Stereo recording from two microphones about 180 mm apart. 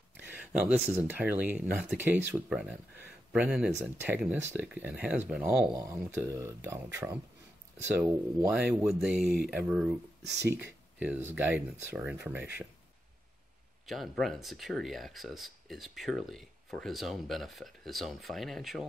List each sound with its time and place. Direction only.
0.3 s speech: 10° right (ahead or behind)
5.8 s speech: 15° right (ahead or behind)
10.2 s speech: 70° right (ahead or behind)
10.5 s speech: 10° right (ahead or behind)
13.8 s speech: centre (ahead or behind)